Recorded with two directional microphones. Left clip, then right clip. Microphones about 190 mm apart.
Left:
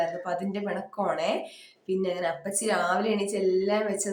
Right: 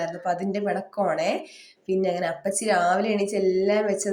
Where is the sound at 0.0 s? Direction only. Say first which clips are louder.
Right 2 dB; 15° right (ahead or behind).